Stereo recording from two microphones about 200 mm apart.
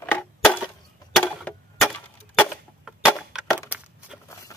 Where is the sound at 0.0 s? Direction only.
5° left (ahead or behind).